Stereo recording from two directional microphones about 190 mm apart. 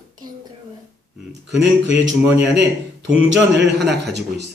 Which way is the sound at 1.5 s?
70° right (ahead or behind).